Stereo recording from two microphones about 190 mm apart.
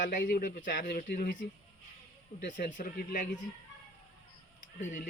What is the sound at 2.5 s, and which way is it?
Speech, 40° left (ahead or behind).